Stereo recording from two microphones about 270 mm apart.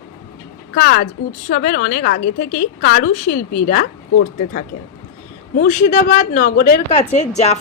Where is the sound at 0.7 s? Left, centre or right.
Left.